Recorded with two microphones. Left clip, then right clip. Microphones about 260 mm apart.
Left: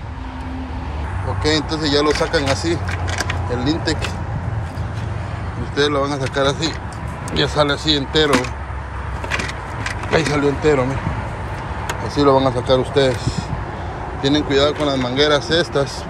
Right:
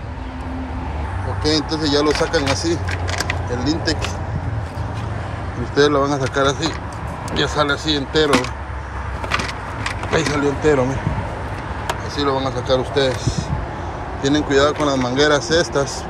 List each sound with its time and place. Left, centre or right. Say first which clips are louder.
1.7 s speech: even; centre
2.0 s speech: even; centre
2.9 s a sound: even; centre
3.5 s speech: left 1 dB; centre
5.8 s speech: right 3 dB; centre
9.3 s vehicle: right 1 dB; centre
11.9 s speech: left 6 dB; centre
14.2 s speech: even; centre